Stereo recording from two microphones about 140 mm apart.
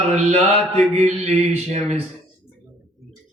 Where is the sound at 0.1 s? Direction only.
50° right (ahead or behind).